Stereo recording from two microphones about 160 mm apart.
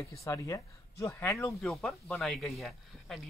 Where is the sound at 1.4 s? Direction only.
5° left (ahead or behind).